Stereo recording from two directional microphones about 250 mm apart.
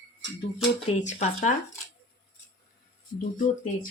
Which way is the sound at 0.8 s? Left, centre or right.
Left.